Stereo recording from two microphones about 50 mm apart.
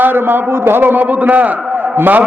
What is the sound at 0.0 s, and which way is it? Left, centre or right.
A man's voice, right.